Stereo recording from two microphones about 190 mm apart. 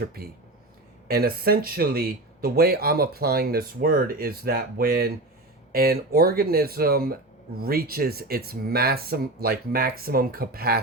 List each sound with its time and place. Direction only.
0.0 s speech: 55° right (ahead or behind)